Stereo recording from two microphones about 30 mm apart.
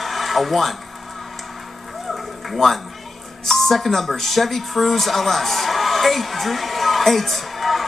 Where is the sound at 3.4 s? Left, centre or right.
Centre.